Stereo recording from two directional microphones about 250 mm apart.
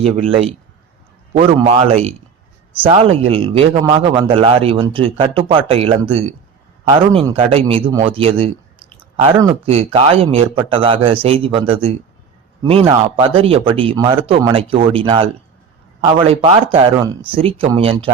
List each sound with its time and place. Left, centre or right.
0.0 s a man's voice: right
13.1 s speech: right